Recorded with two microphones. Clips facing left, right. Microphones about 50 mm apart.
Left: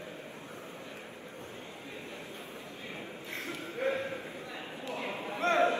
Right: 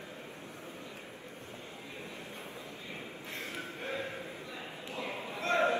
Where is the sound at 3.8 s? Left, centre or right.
Left.